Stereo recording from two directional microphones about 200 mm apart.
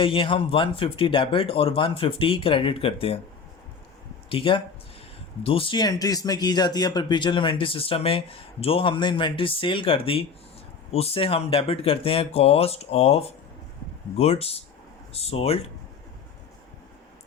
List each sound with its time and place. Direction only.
0.0 s speech: 25° left (ahead or behind)
4.3 s speech: 25° left (ahead or behind)